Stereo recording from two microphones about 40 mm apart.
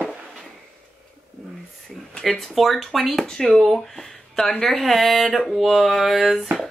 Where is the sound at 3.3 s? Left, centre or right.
Centre.